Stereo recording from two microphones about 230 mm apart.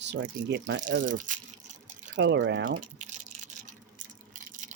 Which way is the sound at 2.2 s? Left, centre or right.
Right.